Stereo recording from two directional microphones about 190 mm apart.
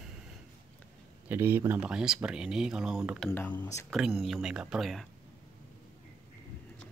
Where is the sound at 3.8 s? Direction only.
5° right (ahead or behind).